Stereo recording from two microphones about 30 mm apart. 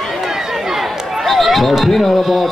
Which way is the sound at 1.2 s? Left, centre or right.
Centre.